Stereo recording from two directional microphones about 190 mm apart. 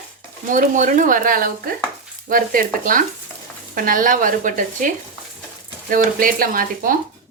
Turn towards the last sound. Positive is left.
turn(degrees=-45)  # may be behind; listen again after turning